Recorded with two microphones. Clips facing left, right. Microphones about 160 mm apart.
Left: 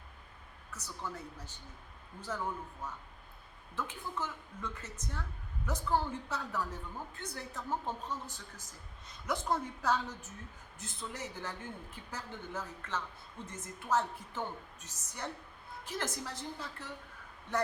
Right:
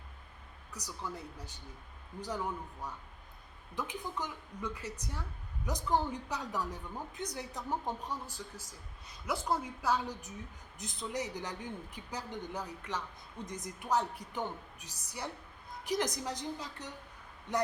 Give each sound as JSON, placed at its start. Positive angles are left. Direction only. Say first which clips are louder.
{"t": 0.7, "sound": "a woman's voice", "louder": "right 1 dB", "side_deg": -15}
{"t": 2.8, "sound": "a woman's voice", "louder": "even", "side_deg": -10}